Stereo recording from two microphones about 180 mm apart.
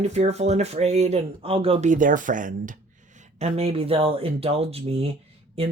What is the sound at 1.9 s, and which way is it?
Speech, 45° right (ahead or behind).